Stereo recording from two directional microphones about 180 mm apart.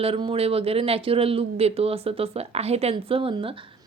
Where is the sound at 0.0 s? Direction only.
30° right (ahead or behind).